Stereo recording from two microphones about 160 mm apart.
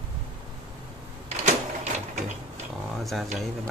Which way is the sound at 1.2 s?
45° right (ahead or behind).